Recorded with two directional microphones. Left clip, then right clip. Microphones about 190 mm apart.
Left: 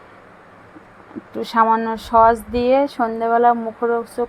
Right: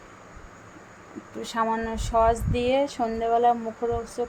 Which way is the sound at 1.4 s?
20° left (ahead or behind).